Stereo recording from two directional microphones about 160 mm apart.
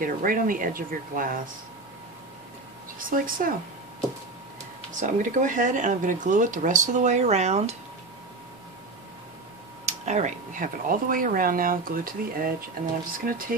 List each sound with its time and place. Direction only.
0.0 s speech: 60° right (ahead or behind)
3.0 s speech: 60° right (ahead or behind)
5.0 s speech: 55° right (ahead or behind)
9.8 s speech: 45° right (ahead or behind); by 13.6 s 60° right (ahead or behind)